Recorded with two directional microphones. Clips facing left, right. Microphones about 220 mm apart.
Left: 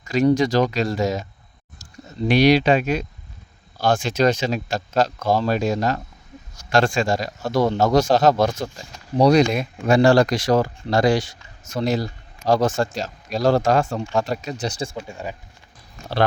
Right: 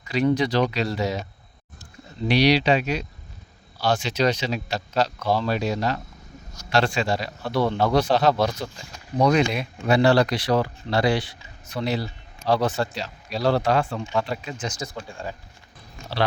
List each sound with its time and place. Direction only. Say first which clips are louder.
0.0 s speech: left 4 dB; 45° left (ahead or behind)
2.2 s speech: left 4 dB; 50° left (ahead or behind)
9.1 s speech: left 4 dB; 35° left (ahead or behind)
14.9 s speech: left 3 dB; 20° left (ahead or behind)